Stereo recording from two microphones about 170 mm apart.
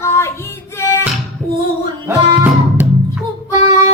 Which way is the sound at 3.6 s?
40° left (ahead or behind).